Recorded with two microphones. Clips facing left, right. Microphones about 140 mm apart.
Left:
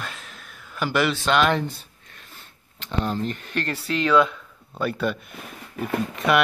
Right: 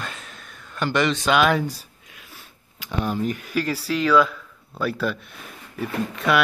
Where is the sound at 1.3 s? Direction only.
5° right (ahead or behind).